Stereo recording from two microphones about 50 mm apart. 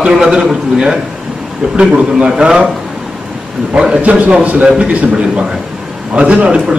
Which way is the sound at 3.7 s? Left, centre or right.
Right.